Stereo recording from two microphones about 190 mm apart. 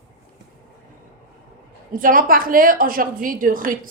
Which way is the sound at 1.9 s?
45° right (ahead or behind).